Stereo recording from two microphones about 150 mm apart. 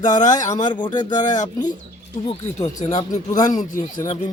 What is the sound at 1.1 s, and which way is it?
Speech, 55° left (ahead or behind).